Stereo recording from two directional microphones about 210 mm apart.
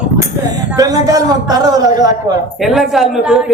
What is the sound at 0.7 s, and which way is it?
A man's voice, 20° right (ahead or behind).